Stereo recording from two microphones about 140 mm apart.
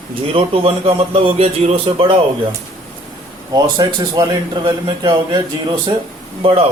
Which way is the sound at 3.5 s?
30° right (ahead or behind).